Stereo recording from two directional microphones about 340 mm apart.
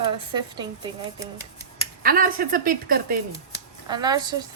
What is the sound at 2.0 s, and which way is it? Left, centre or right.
A woman's voice, right.